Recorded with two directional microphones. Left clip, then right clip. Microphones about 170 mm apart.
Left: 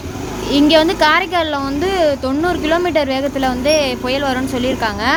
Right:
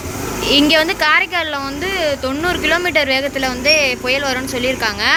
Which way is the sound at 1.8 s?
30° left (ahead or behind).